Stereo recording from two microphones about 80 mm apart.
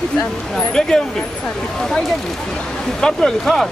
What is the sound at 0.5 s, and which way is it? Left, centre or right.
Speech, centre.